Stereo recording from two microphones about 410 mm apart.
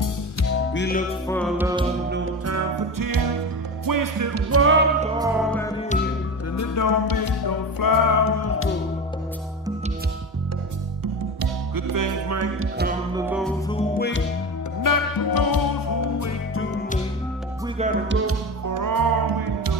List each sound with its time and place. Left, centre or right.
0.7 s music: left
1.2 s music: centre
2.0 s music: right
5.0 s music: centre
6.5 s music: left
11.7 s music: right
13.1 s music: centre
13.7 s music: left
14.8 s music: left
17.7 s music: centre
18.7 s music: right